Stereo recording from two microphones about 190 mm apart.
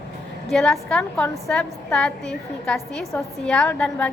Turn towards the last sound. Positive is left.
turn(degrees=5)  # may be behind; listen again after turning